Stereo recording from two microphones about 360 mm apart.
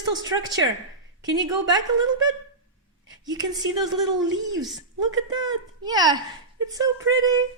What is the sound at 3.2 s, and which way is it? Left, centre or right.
A man's voice, centre.